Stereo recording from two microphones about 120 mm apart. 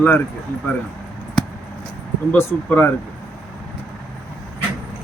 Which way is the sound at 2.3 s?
15° left (ahead or behind).